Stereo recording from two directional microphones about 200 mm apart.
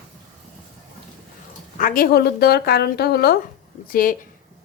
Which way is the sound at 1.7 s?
45° left (ahead or behind).